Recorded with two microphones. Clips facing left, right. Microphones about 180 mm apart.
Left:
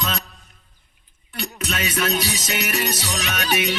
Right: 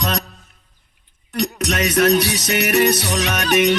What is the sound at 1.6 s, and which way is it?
Music, 70° right (ahead or behind).